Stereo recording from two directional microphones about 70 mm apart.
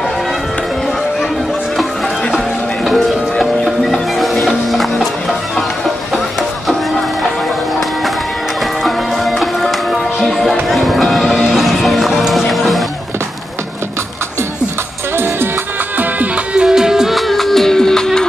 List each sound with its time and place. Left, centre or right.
2.8 s music: centre
8.8 s music: centre
16.0 s music: right
16.6 s music: centre